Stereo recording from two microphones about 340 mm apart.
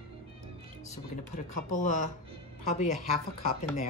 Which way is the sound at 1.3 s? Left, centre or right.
Left.